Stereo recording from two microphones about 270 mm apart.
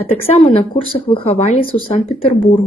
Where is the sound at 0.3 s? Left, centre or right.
Left.